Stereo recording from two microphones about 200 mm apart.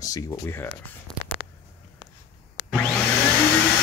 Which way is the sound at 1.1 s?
5° left (ahead or behind).